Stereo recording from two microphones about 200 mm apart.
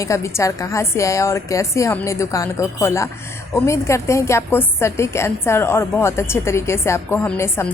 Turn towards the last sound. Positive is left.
turn(degrees=10)  # may be behind; listen again after turning